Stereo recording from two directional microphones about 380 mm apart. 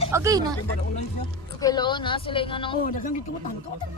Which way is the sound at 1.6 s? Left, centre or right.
Centre.